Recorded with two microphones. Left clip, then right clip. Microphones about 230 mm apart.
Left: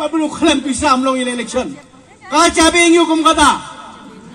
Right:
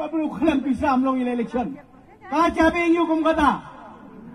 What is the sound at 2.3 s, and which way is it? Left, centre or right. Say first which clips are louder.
A man's voice: left 8 dB; right.